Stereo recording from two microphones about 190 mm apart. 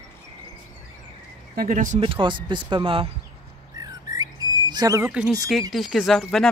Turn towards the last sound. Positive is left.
turn(degrees=0)  # may be behind; listen again after turning